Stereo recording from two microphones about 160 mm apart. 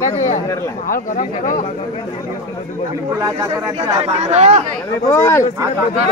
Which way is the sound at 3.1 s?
25° right (ahead or behind).